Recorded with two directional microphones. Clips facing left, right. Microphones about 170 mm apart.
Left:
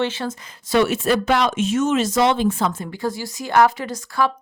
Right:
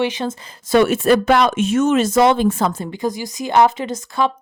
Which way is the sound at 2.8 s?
20° right (ahead or behind).